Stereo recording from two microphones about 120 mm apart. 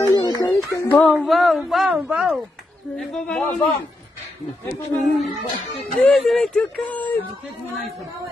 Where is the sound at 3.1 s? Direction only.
10° left (ahead or behind).